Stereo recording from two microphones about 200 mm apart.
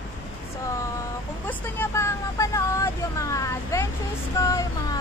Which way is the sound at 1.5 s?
10° left (ahead or behind).